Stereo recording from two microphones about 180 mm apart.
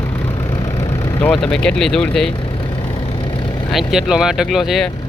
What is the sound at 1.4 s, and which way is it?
Speech, 5° left (ahead or behind).